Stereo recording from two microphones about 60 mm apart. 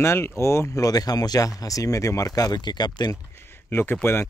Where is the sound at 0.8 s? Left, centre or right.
Left.